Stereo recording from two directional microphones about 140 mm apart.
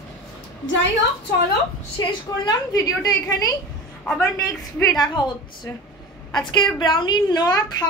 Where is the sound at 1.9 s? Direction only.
25° left (ahead or behind).